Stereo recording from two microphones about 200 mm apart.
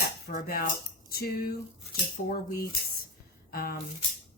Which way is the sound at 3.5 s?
50° left (ahead or behind).